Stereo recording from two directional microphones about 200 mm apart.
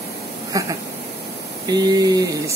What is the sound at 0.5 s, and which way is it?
Speech, 15° right (ahead or behind).